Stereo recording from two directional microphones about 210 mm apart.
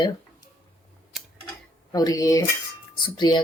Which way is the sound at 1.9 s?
15° left (ahead or behind).